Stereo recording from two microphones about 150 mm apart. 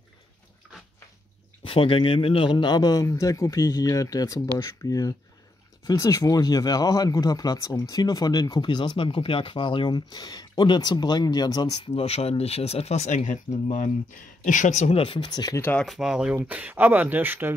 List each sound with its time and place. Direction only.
1.6 s speech: 35° left (ahead or behind)
11.9 s speech: 40° left (ahead or behind); by 15.6 s 25° left (ahead or behind)
15.6 s speech: 10° left (ahead or behind)
15.9 s speech: 5° right (ahead or behind)